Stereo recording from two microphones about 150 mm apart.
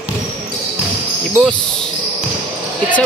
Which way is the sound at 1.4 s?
5° left (ahead or behind).